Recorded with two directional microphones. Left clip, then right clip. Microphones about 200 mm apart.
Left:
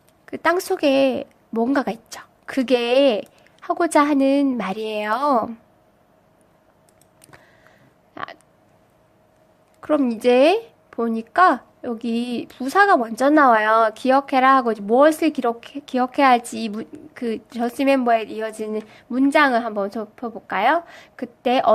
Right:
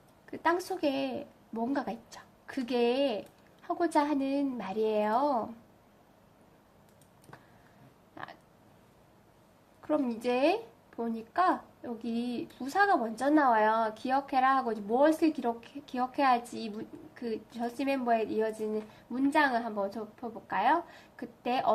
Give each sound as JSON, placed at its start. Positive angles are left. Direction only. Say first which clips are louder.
{"t": 0.3, "sound": "a woman's voice", "louder": "left 10 dB", "side_deg": 50}
{"t": 8.1, "sound": "a sound", "louder": "left 12 dB", "side_deg": 55}
{"t": 9.8, "sound": "a woman's voice", "louder": "left 12 dB", "side_deg": 50}